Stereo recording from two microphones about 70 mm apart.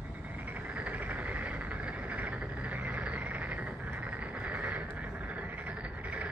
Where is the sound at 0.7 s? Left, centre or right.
Right.